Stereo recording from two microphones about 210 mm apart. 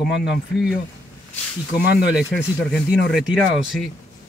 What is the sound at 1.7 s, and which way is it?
Speech, centre (ahead or behind).